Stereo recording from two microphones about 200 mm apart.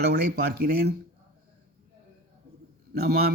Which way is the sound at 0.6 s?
55° right (ahead or behind).